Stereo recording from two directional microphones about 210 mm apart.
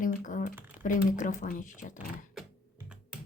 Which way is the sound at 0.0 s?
40° left (ahead or behind).